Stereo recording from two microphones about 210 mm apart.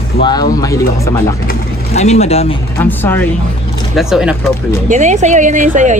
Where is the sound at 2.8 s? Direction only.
10° left (ahead or behind).